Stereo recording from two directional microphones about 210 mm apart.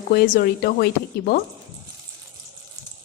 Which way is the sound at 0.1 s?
45° left (ahead or behind).